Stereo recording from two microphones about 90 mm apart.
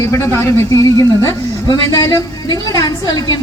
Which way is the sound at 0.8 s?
40° left (ahead or behind).